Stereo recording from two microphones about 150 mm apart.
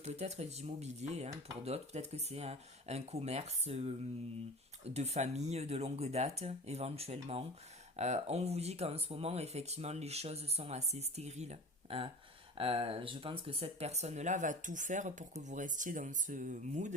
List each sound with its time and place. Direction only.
0.0 s speech: 45° right (ahead or behind)
4.9 s speech: 45° right (ahead or behind)